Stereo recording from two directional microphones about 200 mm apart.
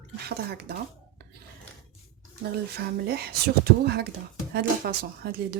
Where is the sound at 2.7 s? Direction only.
55° right (ahead or behind).